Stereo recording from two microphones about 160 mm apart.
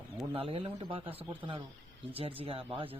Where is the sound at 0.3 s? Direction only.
35° right (ahead or behind).